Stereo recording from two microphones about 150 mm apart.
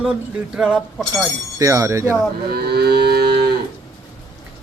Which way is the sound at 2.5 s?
90° right.